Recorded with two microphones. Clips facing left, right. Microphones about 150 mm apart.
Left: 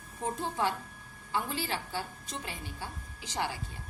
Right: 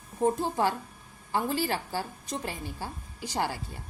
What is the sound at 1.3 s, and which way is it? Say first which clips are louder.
A woman's voice: right 5 dB; 45° right (ahead or behind).